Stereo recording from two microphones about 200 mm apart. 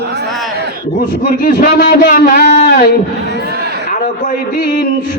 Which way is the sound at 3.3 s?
55° right (ahead or behind).